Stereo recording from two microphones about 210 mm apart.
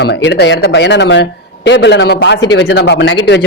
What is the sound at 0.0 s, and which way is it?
Speech, 55° left (ahead or behind).